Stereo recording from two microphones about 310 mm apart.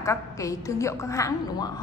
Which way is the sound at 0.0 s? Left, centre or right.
Centre.